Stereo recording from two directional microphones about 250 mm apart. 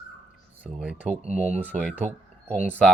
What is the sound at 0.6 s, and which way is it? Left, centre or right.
Speech, centre.